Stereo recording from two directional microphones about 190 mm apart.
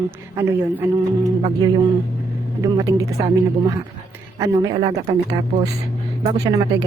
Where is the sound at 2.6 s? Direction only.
15° right (ahead or behind).